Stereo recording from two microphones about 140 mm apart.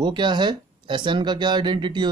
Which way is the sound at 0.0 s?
30° right (ahead or behind).